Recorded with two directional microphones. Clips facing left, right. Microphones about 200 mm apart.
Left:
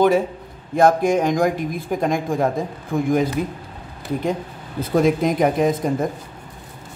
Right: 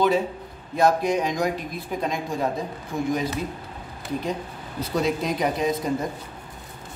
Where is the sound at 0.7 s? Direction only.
50° left (ahead or behind).